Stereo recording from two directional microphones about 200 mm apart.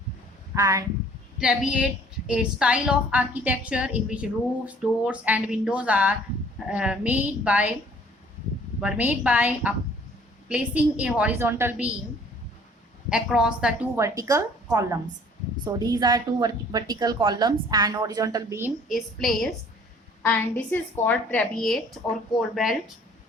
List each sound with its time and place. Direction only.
0.5 s a woman's voice: 15° right (ahead or behind)
1.4 s a woman's voice: 5° right (ahead or behind)
8.8 s a woman's voice: 5° right (ahead or behind)
13.1 s a woman's voice: 5° right (ahead or behind)
18.9 s a woman's voice: centre (ahead or behind)